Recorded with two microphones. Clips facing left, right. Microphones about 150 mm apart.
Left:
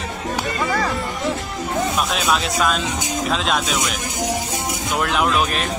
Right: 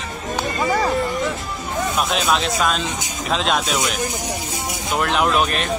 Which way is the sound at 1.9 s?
Centre (ahead or behind).